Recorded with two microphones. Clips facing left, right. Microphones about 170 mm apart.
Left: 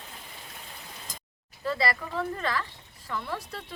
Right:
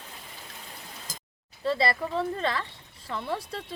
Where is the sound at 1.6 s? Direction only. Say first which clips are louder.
Right 3 dB; 30° right (ahead or behind).